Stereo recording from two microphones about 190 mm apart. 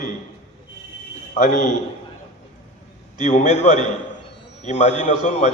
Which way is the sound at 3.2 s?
40° left (ahead or behind).